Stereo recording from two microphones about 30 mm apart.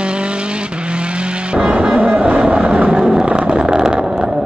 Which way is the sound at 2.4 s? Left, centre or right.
Right.